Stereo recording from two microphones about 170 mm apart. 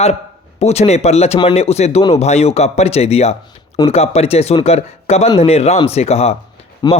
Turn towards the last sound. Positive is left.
turn(degrees=25)  # may be behind; listen again after turning